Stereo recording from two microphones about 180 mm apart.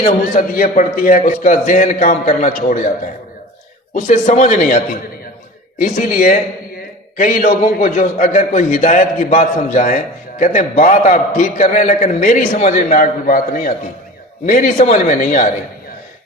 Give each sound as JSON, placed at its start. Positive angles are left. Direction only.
{"t": 0.3, "sound": "a man's voice", "side_deg": 45}
{"t": 4.0, "sound": "a man's voice", "side_deg": 40}
{"t": 5.8, "sound": "a man's voice", "side_deg": 50}